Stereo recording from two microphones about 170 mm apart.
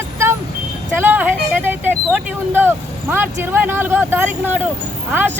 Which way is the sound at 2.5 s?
10° right (ahead or behind).